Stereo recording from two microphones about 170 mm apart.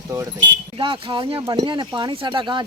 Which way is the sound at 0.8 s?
30° right (ahead or behind).